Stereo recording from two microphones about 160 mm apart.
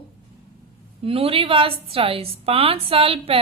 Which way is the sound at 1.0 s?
35° right (ahead or behind).